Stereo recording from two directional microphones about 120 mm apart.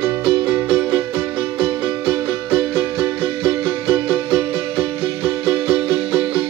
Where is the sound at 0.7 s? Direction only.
20° right (ahead or behind).